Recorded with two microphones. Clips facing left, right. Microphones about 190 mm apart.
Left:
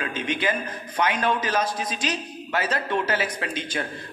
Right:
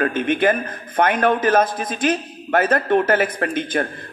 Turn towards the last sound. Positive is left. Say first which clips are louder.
# right 8 dB
turn(degrees=-50)  # may be behind; listen again after turning